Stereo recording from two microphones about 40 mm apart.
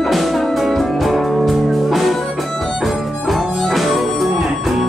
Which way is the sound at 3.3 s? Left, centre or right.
Centre.